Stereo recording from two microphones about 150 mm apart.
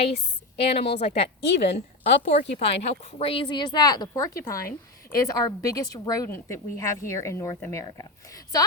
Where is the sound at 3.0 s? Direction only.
40° left (ahead or behind).